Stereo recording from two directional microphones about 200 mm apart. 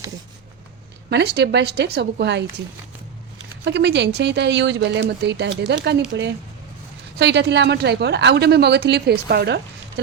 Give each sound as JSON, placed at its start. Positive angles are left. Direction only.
{"t": 1.1, "sound": "speech", "side_deg": -55}
{"t": 3.6, "sound": "speech", "side_deg": -60}